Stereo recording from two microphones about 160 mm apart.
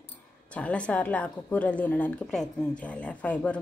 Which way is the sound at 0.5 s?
10° left (ahead or behind).